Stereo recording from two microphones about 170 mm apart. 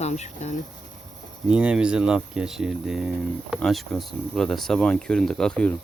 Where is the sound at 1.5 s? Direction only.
5° right (ahead or behind).